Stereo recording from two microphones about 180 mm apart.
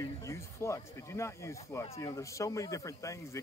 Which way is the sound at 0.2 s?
15° left (ahead or behind).